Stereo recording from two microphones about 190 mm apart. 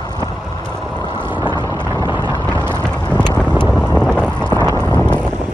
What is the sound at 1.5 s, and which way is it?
Vehicle, 25° left (ahead or behind).